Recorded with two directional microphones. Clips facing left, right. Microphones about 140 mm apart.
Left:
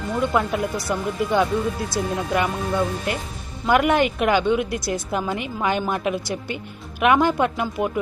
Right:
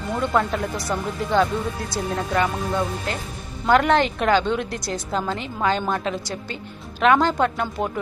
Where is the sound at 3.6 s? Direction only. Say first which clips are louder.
Even; 10° left (ahead or behind).